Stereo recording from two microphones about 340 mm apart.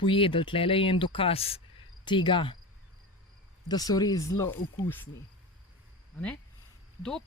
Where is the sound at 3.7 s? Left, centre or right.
Centre.